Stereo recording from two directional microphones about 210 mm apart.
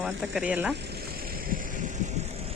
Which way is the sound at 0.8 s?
50° right (ahead or behind).